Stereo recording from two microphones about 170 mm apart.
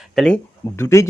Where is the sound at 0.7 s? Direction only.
15° left (ahead or behind).